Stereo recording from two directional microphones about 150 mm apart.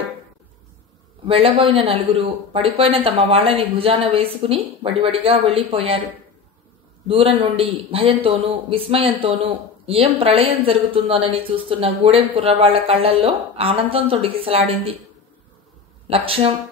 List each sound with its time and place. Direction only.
1.2 s a man's voice: 40° right (ahead or behind)
7.1 s a man's voice: 35° right (ahead or behind)
16.1 s a man's voice: 40° right (ahead or behind)